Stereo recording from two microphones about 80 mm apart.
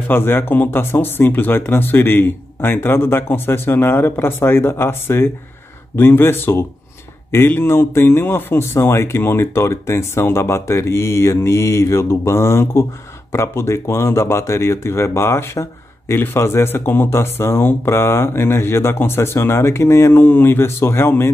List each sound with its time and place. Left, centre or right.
0.1 s speech: left